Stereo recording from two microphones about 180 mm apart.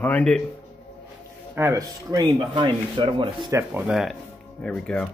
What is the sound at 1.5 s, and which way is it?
Speech, 15° right (ahead or behind).